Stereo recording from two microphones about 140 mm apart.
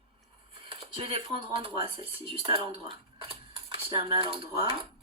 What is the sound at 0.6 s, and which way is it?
Speech, 40° right (ahead or behind).